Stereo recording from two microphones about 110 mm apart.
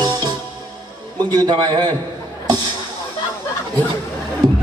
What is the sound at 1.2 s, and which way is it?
Speech, 40° right (ahead or behind).